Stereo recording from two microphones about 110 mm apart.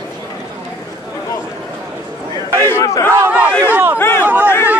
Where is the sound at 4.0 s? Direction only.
20° left (ahead or behind).